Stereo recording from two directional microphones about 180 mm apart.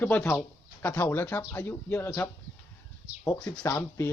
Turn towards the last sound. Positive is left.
turn(degrees=15)  # may be behind; listen again after turning